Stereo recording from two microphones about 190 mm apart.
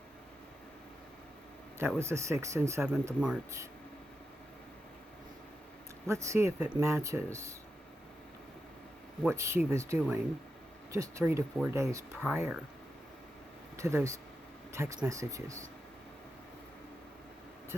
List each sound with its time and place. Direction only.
2.0 s speech: 15° right (ahead or behind)
6.1 s speech: 15° right (ahead or behind)
9.2 s speech: 15° right (ahead or behind)
13.7 s speech: 15° right (ahead or behind)